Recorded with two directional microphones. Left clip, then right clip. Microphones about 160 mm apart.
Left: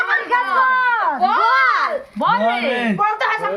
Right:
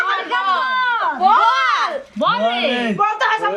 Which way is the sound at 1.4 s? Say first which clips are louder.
Left 1 dB; 60° left (ahead or behind).